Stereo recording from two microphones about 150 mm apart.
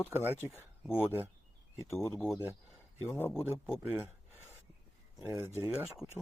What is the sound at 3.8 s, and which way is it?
Speech, 15° right (ahead or behind).